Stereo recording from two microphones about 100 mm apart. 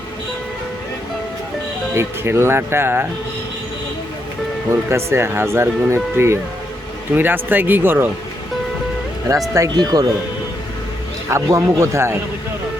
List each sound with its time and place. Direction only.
1.9 s speech: 25° right (ahead or behind)
4.7 s speech: 25° right (ahead or behind)
9.3 s speech: 35° right (ahead or behind)
11.3 s speech: 30° right (ahead or behind)